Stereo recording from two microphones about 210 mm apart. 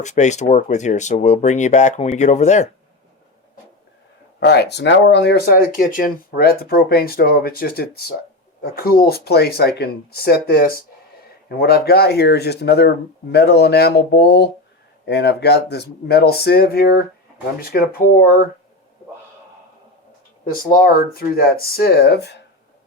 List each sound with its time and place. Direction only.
0.0 s speech: 35° left (ahead or behind)
4.4 s speech: 50° left (ahead or behind)
20.4 s speech: 45° left (ahead or behind)